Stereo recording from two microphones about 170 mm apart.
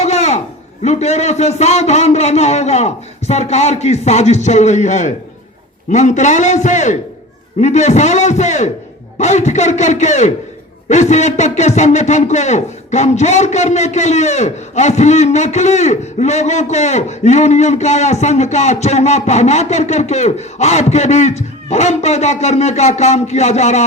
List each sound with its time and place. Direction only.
0.0 s a man's voice: 40° left (ahead or behind)